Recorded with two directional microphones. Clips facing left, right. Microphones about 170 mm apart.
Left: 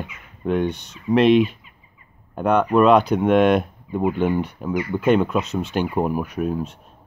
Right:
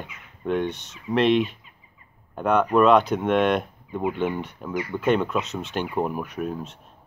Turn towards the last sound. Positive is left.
turn(degrees=0)  # may be behind; listen again after turning